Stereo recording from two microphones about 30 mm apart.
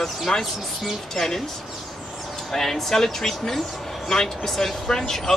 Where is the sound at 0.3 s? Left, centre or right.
Left.